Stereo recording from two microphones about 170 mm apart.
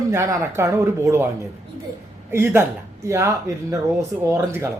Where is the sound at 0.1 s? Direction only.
20° right (ahead or behind).